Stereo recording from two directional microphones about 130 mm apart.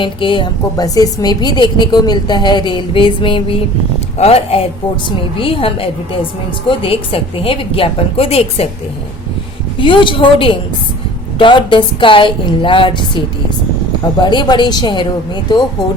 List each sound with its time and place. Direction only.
0.0 s a woman's voice: 40° left (ahead or behind)
9.7 s a woman's voice: 40° left (ahead or behind)